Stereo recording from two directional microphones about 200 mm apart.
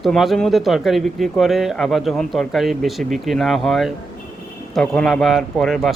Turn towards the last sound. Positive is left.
turn(degrees=0)  # may be behind; listen again after turning